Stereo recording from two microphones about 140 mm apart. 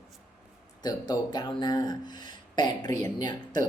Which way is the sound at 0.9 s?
30° left (ahead or behind).